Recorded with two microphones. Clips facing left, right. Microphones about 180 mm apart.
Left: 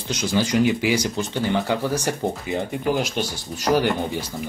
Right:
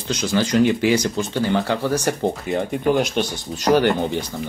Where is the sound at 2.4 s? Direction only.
60° right (ahead or behind).